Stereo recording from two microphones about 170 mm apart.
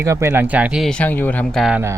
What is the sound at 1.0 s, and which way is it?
Speech, 10° left (ahead or behind).